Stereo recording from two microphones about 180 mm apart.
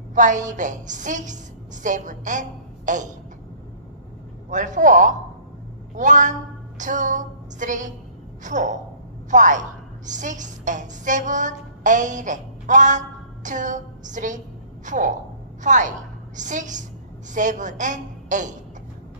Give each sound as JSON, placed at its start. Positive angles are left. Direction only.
{"t": 0.1, "sound": "a woman's voice", "side_deg": -45}
{"t": 4.5, "sound": "a woman's voice", "side_deg": -45}
{"t": 6.8, "sound": "a sound", "side_deg": -45}
{"t": 8.5, "sound": "a woman's voice", "side_deg": -45}